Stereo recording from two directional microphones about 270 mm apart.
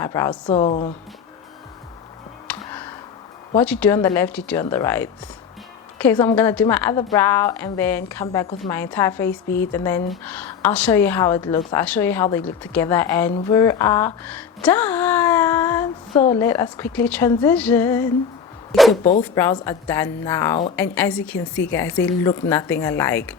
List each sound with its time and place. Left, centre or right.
0.0 s a woman's voice: centre
2.5 s music: centre
3.6 s a woman's voice: centre